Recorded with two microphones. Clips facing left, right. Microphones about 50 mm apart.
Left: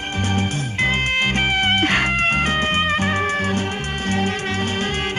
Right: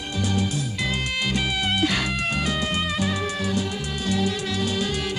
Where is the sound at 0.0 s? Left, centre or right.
Left.